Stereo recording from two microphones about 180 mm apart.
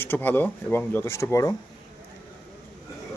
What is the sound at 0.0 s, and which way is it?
Speech, 10° left (ahead or behind).